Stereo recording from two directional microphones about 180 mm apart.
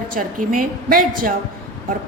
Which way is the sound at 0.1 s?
50° right (ahead or behind).